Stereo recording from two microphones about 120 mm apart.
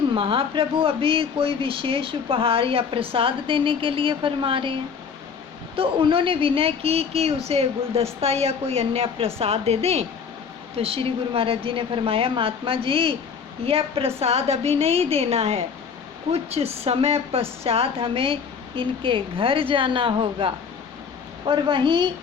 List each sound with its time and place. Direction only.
0.1 s a woman's voice: 50° right (ahead or behind)